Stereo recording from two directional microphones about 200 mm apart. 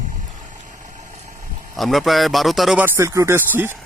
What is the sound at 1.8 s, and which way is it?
Speech, centre (ahead or behind).